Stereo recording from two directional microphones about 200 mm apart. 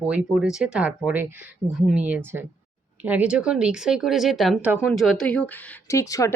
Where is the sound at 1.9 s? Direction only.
10° right (ahead or behind).